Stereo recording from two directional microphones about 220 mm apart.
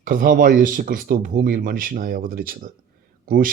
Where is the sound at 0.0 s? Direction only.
40° right (ahead or behind).